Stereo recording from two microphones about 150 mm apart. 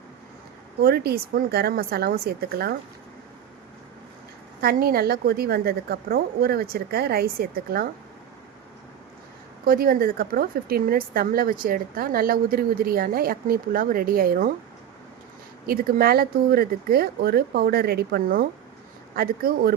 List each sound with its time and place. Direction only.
0.8 s a woman's voice: 90° right
4.6 s a woman's voice: 90° right
9.6 s a woman's voice: 80° right
15.6 s a woman's voice: 80° right